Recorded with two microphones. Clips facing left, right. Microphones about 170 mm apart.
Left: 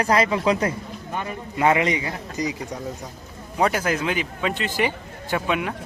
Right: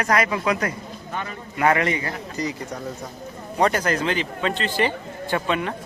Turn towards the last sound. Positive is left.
turn(degrees=5)  # may be behind; listen again after turning